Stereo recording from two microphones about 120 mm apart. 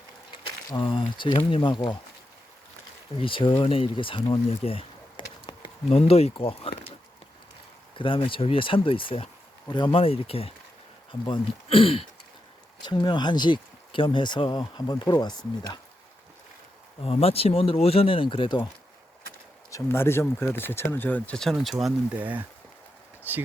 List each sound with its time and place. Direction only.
0.7 s speech: 45° left (ahead or behind)
3.2 s speech: 45° left (ahead or behind)
6.0 s speech: 60° left (ahead or behind)
7.9 s speech: 45° left (ahead or behind)
10.0 s speech: 55° left (ahead or behind)
12.8 s speech: 40° left (ahead or behind)
17.0 s speech: 55° left (ahead or behind); by 18.7 s 40° left (ahead or behind)
19.7 s speech: 20° left (ahead or behind); by 22.2 s centre (ahead or behind)
22.2 s speech: 15° right (ahead or behind)